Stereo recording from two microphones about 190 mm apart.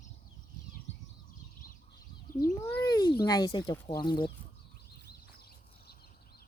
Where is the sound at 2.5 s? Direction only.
10° left (ahead or behind).